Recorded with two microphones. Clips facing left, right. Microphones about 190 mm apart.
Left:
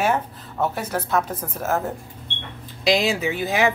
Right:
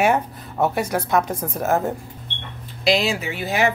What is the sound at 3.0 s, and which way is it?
Speech, 15° left (ahead or behind).